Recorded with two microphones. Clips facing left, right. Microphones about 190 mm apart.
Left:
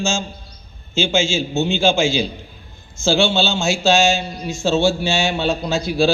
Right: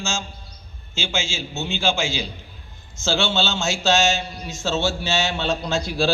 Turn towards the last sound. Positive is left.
turn(degrees=5)  # may be behind; listen again after turning